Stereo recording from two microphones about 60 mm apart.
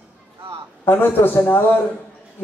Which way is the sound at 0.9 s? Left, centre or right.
Left.